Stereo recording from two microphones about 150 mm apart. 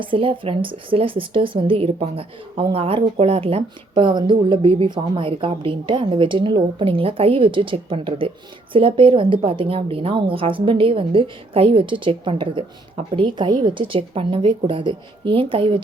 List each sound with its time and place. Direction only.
0.0 s speech: 35° right (ahead or behind)